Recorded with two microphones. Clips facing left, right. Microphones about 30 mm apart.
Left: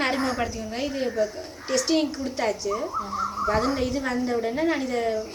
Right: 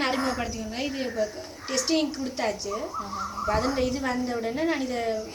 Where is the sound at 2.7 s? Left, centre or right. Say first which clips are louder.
Left 4 dB; left.